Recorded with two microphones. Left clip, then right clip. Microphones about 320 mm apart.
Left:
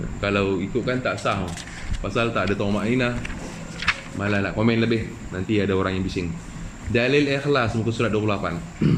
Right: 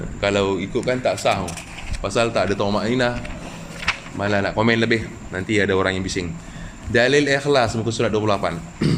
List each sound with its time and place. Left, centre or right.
0.2 s speech: centre
4.2 s a man's voice: centre